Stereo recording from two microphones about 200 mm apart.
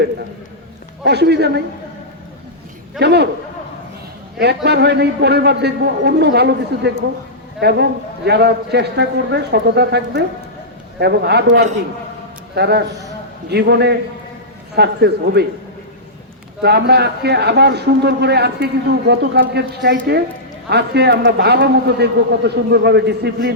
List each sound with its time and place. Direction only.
1.0 s a man's voice: 55° right (ahead or behind)
3.0 s a man's voice: 55° right (ahead or behind)
4.4 s a man's voice: 55° right (ahead or behind)
16.6 s a man's voice: 55° right (ahead or behind)